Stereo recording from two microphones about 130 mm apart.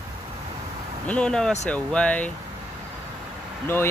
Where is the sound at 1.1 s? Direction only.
5° left (ahead or behind).